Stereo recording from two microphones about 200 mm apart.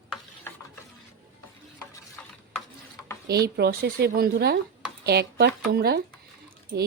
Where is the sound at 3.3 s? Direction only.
55° right (ahead or behind).